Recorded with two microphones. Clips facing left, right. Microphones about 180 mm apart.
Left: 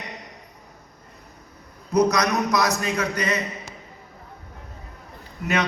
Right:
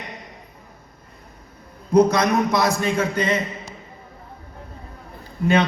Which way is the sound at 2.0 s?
30° right (ahead or behind).